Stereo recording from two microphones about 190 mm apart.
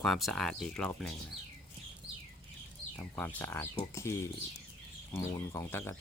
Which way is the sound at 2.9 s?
10° left (ahead or behind).